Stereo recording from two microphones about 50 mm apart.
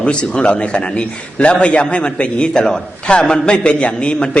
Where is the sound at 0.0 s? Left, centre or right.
Left.